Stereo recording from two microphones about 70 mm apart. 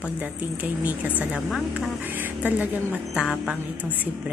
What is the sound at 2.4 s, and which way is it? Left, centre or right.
Speech, right.